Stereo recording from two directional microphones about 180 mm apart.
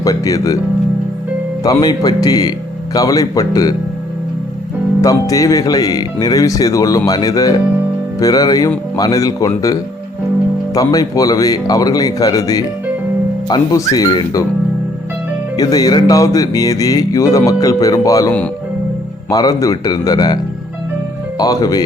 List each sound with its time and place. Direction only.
0.0 s speech: 20° left (ahead or behind)
1.6 s speech: 20° left (ahead or behind)
5.0 s speech: 20° left (ahead or behind)
10.8 s speech: 20° left (ahead or behind)
15.5 s speech: 20° left (ahead or behind)